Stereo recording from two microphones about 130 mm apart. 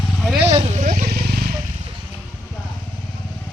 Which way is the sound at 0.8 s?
90° right.